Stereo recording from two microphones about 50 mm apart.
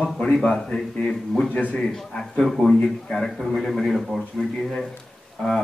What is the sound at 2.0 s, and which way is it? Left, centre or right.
A man's voice, centre.